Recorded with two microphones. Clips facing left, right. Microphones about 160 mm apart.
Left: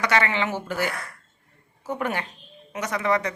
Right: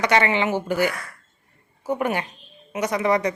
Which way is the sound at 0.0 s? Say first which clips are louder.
Right 3 dB; 20° right (ahead or behind).